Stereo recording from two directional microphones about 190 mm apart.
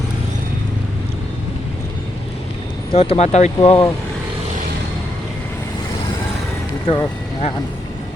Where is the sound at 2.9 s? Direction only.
30° left (ahead or behind).